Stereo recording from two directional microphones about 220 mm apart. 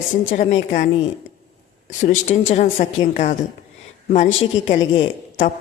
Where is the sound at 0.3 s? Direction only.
35° left (ahead or behind).